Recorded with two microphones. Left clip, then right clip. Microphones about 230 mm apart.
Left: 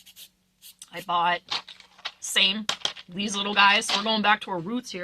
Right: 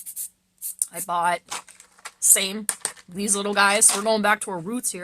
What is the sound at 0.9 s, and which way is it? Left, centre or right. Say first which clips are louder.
Speech: right 1 dB; right.